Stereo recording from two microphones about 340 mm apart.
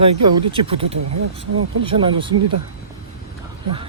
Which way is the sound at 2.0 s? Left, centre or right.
Centre.